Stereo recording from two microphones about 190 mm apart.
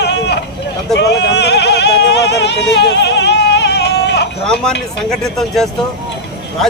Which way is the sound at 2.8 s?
65° left (ahead or behind).